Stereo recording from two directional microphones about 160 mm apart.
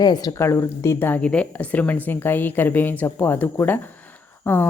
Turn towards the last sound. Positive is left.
turn(degrees=15)  # may be behind; listen again after turning